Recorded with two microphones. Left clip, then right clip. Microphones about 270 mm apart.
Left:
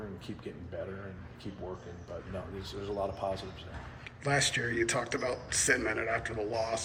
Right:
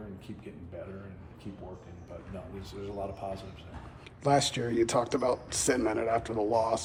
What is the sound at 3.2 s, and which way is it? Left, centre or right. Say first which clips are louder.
Speech: left 4 dB; centre.